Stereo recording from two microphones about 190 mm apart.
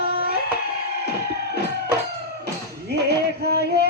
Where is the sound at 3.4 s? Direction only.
60° right (ahead or behind).